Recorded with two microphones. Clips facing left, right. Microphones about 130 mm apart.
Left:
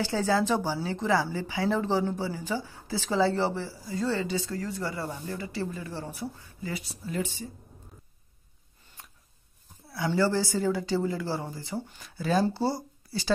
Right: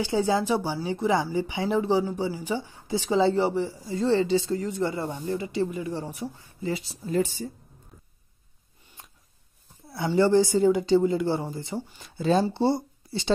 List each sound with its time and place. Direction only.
0.0 s speech: 15° right (ahead or behind)
7.1 s a woman's voice: 40° right (ahead or behind)
9.8 s speech: 25° right (ahead or behind)